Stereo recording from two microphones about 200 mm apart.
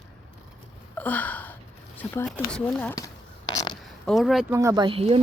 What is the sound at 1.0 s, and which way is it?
Gasp, 10° left (ahead or behind).